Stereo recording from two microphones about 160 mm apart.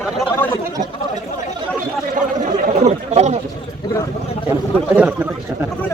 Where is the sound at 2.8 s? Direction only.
45° right (ahead or behind).